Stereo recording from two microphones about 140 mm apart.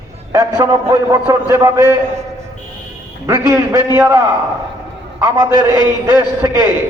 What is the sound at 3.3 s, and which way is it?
A man's voice, 15° right (ahead or behind).